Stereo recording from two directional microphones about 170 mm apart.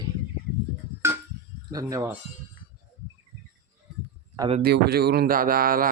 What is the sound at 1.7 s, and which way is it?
Speech, 20° right (ahead or behind).